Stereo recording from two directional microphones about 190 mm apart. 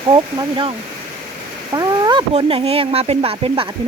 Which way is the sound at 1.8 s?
20° right (ahead or behind).